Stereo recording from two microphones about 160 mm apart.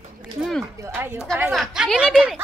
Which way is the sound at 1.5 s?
Centre (ahead or behind).